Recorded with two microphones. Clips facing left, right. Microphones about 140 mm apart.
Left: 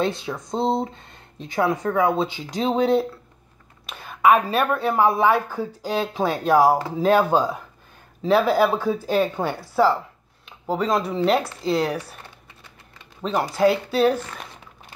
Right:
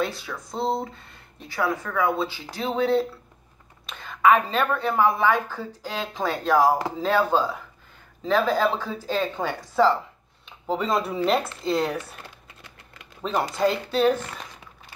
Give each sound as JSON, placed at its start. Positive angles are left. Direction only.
{"t": 0.0, "sound": "a woman's voice", "side_deg": 25}
{"t": 13.2, "sound": "speech", "side_deg": 0}